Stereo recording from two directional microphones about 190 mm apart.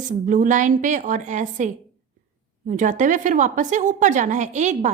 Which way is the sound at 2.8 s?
40° right (ahead or behind).